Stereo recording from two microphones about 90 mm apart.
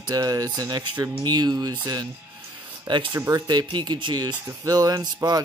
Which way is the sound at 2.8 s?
55° right (ahead or behind).